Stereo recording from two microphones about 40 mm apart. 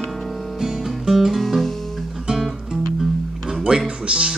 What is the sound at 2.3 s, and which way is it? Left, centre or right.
Music, centre.